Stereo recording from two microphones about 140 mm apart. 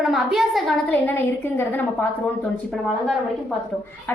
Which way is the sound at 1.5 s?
15° left (ahead or behind).